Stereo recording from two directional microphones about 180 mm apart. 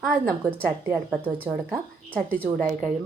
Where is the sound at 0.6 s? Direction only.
10° right (ahead or behind).